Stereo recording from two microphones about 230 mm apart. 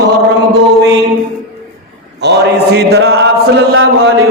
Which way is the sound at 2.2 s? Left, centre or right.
Right.